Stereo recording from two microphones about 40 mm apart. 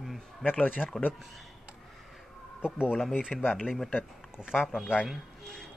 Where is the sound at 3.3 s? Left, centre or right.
Left.